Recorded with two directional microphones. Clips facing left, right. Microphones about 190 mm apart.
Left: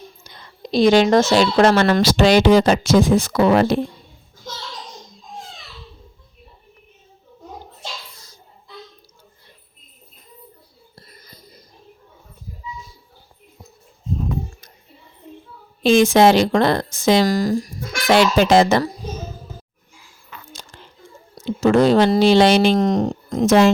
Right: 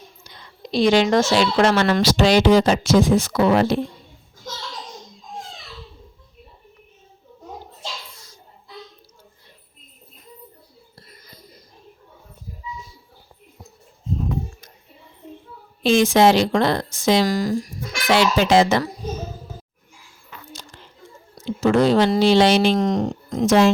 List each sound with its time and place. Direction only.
0.3 s a woman's voice: 45° left (ahead or behind)
15.8 s a woman's voice: 50° left (ahead or behind)
21.6 s a woman's voice: 45° left (ahead or behind)